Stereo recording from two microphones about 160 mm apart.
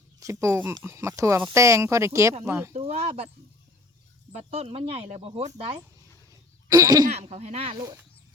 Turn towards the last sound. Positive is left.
turn(degrees=-40)  # may be behind; listen again after turning